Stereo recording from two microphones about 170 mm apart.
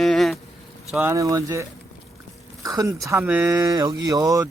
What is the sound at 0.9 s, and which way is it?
Speech, 10° right (ahead or behind).